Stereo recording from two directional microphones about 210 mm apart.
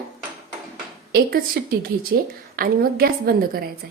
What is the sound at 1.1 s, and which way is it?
A woman's voice, 45° right (ahead or behind).